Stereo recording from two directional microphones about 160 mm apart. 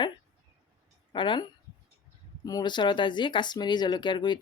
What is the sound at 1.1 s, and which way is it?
Speech, 30° left (ahead or behind).